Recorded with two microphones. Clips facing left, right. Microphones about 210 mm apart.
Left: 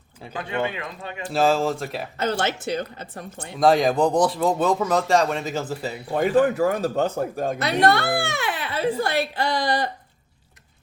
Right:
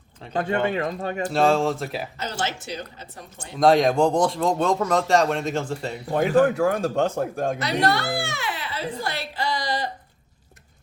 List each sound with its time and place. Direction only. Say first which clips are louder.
0.3 s speech: right 4 dB; 45° right (ahead or behind)
1.3 s speech: even; centre (ahead or behind)
2.1 s a child's voice: left 5 dB; 60° left (ahead or behind)
3.6 s speech: right 1 dB; centre (ahead or behind)
7.6 s a child's voice: left 5 dB; 55° left (ahead or behind)